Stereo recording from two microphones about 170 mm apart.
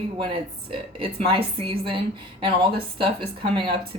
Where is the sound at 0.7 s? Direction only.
30° right (ahead or behind).